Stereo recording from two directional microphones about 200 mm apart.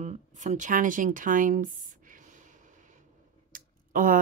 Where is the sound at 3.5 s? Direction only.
40° right (ahead or behind).